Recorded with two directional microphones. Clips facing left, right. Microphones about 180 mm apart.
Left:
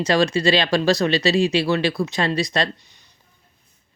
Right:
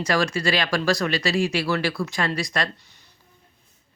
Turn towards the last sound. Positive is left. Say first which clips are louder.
# left 4 dB
turn(degrees=20)  # may be behind; listen again after turning